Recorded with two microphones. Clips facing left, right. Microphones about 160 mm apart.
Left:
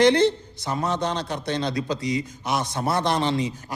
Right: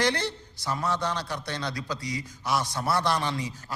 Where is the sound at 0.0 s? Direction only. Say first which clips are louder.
Left 10 dB; 20° left (ahead or behind).